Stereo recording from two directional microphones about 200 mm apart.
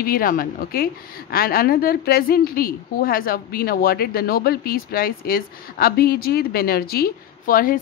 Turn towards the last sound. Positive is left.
turn(degrees=45)  # may be behind; listen again after turning